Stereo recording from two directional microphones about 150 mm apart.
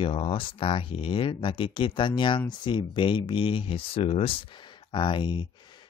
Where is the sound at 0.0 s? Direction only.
40° left (ahead or behind).